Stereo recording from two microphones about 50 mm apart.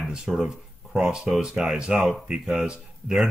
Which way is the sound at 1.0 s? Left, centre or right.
Centre.